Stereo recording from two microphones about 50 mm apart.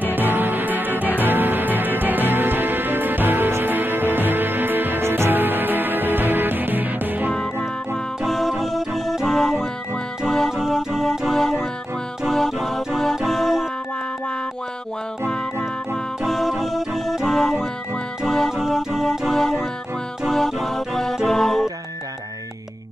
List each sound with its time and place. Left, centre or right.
0.1 s music: right
8.3 s music: centre
16.3 s music: centre
18.6 s music: centre